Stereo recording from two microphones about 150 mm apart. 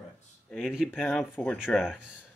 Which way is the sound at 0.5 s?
Centre (ahead or behind).